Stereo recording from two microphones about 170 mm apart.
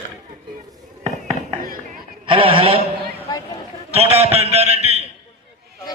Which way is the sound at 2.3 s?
30° right (ahead or behind).